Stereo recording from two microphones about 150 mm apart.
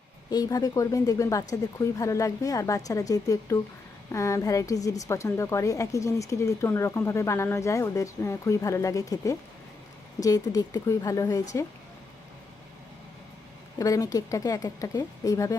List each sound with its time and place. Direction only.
0.3 s a woman's voice: 25° left (ahead or behind)
13.7 s a woman's voice: 20° left (ahead or behind)